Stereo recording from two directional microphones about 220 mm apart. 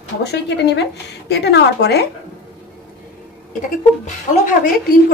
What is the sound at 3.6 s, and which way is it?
Speech, 35° left (ahead or behind).